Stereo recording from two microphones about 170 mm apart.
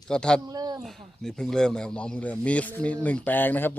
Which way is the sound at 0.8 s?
Centre (ahead or behind).